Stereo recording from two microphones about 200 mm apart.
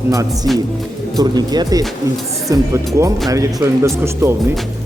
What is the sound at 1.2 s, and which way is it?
Speech, 20° right (ahead or behind).